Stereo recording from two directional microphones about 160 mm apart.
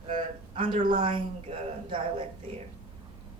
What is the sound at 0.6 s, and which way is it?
Speech, 30° right (ahead or behind).